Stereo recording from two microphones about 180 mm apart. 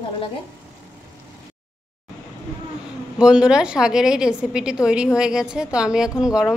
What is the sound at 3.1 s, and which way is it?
A woman's voice, 5° right (ahead or behind).